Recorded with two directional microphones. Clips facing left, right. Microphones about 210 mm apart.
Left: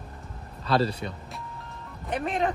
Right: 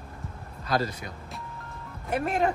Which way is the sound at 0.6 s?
30° left (ahead or behind).